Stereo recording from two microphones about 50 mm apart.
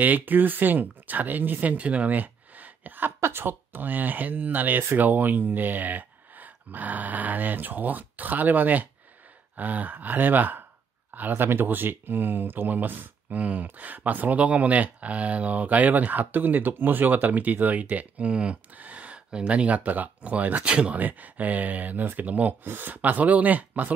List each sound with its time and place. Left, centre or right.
0.0 s speech: right
3.2 s a sound: right
3.4 s speech: right